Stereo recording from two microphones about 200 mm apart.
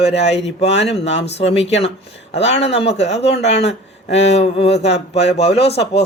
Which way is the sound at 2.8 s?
30° left (ahead or behind).